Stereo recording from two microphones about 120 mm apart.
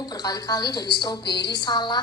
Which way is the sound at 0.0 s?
35° left (ahead or behind).